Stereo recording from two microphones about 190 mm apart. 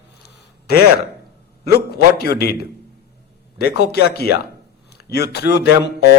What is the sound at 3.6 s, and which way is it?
A man's voice, 60° left (ahead or behind).